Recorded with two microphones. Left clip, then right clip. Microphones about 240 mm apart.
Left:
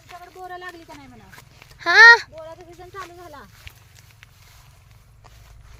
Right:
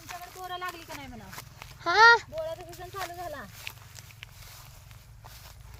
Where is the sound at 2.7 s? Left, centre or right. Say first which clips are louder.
Left 1 dB; right.